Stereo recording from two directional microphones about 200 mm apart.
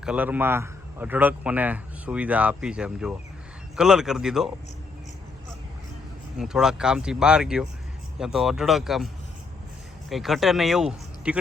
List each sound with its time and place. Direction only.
0.0 s a man's voice: 5° right (ahead or behind)
6.4 s speech: 5° right (ahead or behind)
10.1 s speech: centre (ahead or behind)